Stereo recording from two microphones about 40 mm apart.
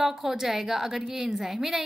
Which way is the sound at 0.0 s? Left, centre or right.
Centre.